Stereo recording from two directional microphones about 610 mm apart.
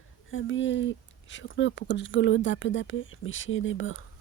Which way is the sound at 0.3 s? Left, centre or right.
Centre.